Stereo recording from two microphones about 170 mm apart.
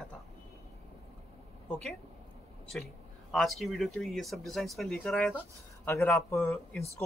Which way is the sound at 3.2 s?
Centre (ahead or behind).